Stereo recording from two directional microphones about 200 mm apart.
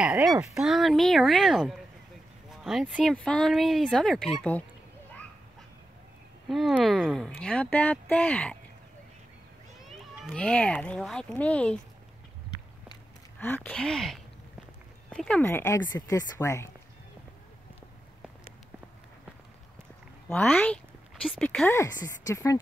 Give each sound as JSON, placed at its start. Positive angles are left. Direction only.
{"t": 0.2, "sound": "speech", "side_deg": -15}
{"t": 0.6, "sound": "speech", "side_deg": 0}
{"t": 6.5, "sound": "speech", "side_deg": 0}
{"t": 9.8, "sound": "speech", "side_deg": 0}
{"t": 13.4, "sound": "speech", "side_deg": 10}
{"t": 20.2, "sound": "speech", "side_deg": 10}